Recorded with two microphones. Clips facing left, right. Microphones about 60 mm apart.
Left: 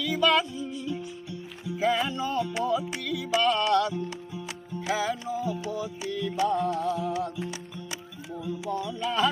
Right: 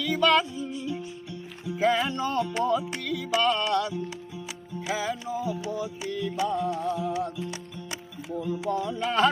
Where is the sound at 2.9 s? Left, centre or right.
Centre.